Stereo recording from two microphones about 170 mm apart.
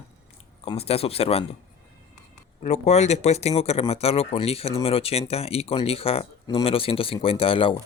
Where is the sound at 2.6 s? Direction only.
40° left (ahead or behind).